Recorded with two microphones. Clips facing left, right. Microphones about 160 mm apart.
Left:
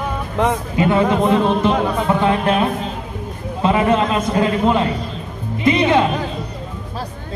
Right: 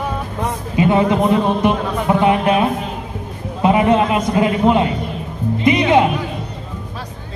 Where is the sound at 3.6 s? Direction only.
20° right (ahead or behind).